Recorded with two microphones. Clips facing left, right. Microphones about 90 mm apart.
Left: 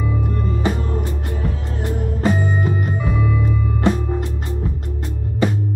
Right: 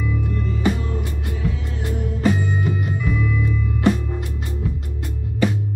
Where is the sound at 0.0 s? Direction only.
40° left (ahead or behind).